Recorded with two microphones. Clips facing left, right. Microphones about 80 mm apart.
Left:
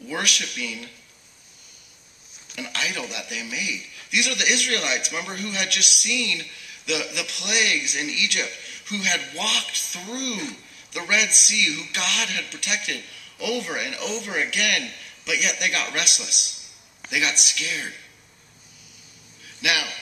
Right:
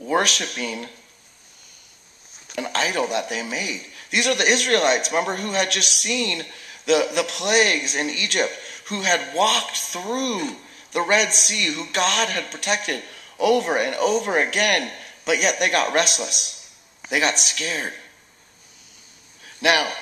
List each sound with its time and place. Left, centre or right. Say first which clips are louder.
0.0 s speech: right 7 dB; right
2.5 s speech: right 6 dB; right
19.4 s a man's voice: right 6 dB; right